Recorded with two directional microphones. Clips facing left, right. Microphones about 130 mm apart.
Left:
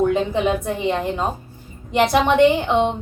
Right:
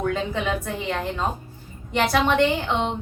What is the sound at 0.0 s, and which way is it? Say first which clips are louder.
A woman's voice: left 6 dB; 20° left (ahead or behind).